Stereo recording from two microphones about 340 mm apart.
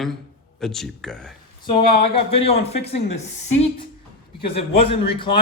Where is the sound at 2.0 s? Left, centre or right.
Centre.